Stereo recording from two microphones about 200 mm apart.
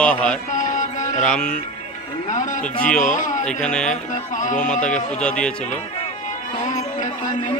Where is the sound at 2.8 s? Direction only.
5° left (ahead or behind).